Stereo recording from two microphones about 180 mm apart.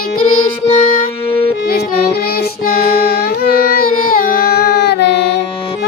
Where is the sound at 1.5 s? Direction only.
60° left (ahead or behind).